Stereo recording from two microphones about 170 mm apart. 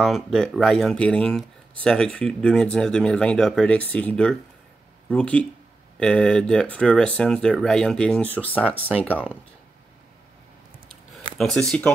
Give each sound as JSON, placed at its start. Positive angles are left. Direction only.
{"t": 0.0, "sound": "speech", "side_deg": 0}
{"t": 8.7, "sound": "speech", "side_deg": -10}
{"t": 11.3, "sound": "speech", "side_deg": 0}